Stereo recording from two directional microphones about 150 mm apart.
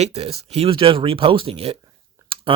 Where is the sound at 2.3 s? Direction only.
35° right (ahead or behind).